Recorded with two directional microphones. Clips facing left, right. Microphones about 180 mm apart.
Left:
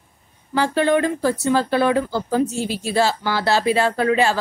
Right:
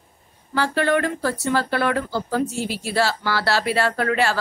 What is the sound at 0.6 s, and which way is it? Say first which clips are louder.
A woman's voice: left 3 dB; 20° left (ahead or behind).